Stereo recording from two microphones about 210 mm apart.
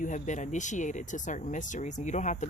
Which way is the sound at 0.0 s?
35° left (ahead or behind).